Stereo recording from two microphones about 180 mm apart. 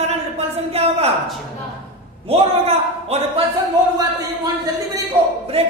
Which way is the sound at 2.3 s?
35° right (ahead or behind).